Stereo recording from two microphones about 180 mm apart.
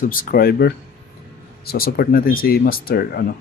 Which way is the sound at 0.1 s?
55° left (ahead or behind).